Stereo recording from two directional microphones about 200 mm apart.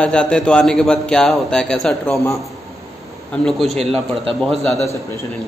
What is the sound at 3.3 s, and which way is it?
Speech, centre (ahead or behind).